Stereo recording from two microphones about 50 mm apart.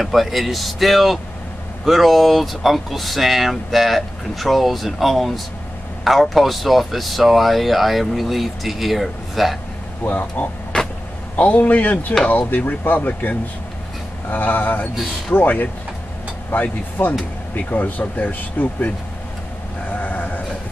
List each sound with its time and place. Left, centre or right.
0.0 s speech: centre
10.0 s speech: left
10.7 s vehicle: left
11.3 s speech: left
14.3 s speech: left
19.9 s sheep: left